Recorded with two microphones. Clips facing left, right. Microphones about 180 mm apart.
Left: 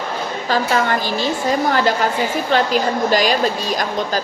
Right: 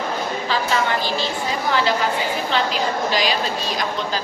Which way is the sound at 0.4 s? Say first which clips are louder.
Left 5 dB; 45° left (ahead or behind).